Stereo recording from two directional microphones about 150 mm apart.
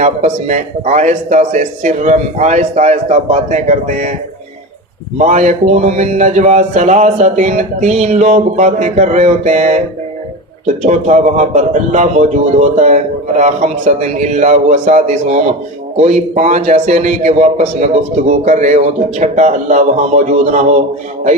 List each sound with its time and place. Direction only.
0.0 s a man's voice: 50° right (ahead or behind)
5.1 s a man's voice: 55° right (ahead or behind)
10.8 s a man's voice: 50° right (ahead or behind)